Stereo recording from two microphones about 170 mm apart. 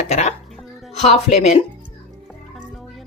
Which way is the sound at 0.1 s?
40° left (ahead or behind).